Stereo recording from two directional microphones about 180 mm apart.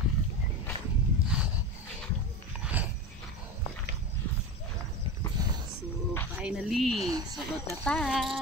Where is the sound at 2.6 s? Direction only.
10° right (ahead or behind).